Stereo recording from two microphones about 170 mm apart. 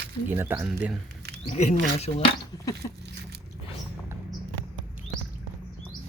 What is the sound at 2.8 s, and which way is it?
Speech, 25° left (ahead or behind).